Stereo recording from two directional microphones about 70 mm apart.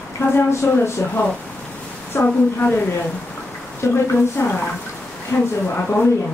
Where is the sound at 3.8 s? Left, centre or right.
Left.